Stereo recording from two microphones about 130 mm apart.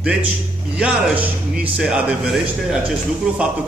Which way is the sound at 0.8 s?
10° right (ahead or behind).